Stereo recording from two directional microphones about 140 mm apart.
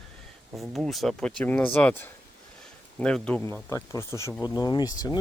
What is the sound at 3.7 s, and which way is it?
Speech, 20° left (ahead or behind).